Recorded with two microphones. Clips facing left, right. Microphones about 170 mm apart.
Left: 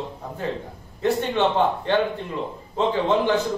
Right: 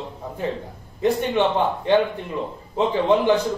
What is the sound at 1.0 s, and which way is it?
A man's voice, 15° right (ahead or behind).